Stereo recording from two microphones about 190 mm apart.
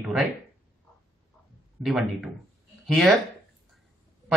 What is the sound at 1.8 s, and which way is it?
Speech, centre (ahead or behind).